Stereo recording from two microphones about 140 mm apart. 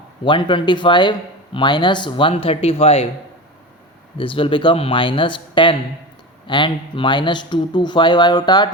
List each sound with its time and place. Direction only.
0.3 s speech: 35° left (ahead or behind)
4.2 s speech: 40° left (ahead or behind)